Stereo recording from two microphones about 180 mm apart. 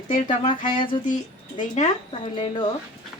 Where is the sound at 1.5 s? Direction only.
40° left (ahead or behind).